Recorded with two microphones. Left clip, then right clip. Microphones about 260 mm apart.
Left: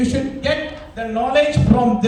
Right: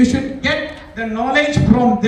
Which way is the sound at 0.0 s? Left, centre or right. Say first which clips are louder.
Right 3 dB; left.